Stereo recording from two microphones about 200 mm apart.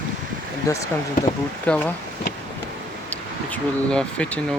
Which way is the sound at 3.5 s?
5° left (ahead or behind).